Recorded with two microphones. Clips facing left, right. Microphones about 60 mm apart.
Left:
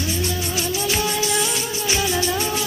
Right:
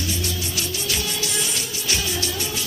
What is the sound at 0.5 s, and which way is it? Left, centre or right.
Music, left.